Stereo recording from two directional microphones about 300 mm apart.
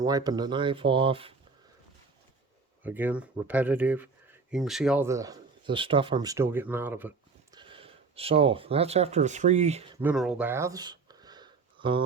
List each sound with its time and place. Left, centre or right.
0.0 s speech: centre
2.8 s speech: centre; by 10.0 s right
10.0 s a sound: centre